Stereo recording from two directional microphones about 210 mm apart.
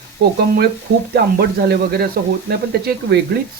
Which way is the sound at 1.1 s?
50° right (ahead or behind).